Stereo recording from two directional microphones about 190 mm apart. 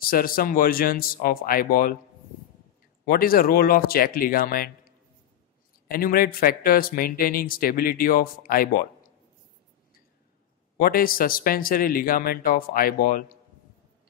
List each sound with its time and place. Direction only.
0.0 s speech: 50° left (ahead or behind)
3.1 s speech: 50° left (ahead or behind)
5.9 s speech: 50° left (ahead or behind)
10.8 s speech: 50° left (ahead or behind)